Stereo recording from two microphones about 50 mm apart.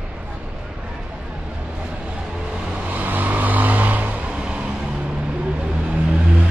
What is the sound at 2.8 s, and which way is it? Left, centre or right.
Vehicle, right.